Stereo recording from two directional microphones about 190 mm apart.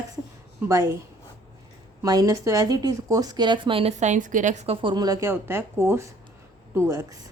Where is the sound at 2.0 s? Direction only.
20° right (ahead or behind).